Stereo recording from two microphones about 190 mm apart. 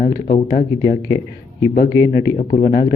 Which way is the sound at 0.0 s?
45° left (ahead or behind).